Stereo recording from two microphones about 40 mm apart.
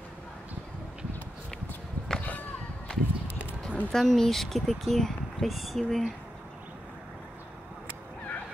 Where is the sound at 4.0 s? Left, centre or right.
Centre.